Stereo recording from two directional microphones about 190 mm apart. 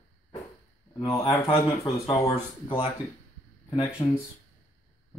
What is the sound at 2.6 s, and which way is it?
Speech, 30° left (ahead or behind).